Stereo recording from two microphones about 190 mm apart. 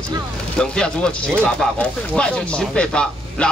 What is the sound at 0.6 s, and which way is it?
Speech, 5° left (ahead or behind).